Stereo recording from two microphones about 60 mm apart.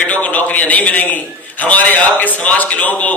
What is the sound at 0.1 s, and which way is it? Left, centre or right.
A man's voice, left.